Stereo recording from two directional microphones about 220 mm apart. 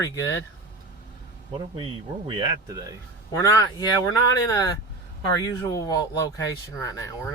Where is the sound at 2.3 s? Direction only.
20° right (ahead or behind).